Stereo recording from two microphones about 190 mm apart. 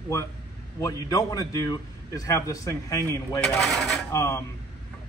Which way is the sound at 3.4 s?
Centre (ahead or behind).